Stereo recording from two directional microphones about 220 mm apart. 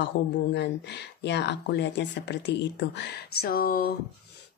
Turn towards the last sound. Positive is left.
turn(degrees=40)  # may be behind; listen again after turning